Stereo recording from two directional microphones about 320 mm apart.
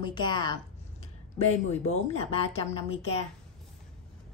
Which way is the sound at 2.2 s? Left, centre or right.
Centre.